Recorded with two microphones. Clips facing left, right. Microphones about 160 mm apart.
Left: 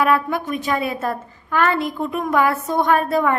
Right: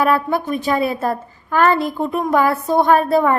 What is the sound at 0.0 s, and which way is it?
A woman's voice, 35° right (ahead or behind).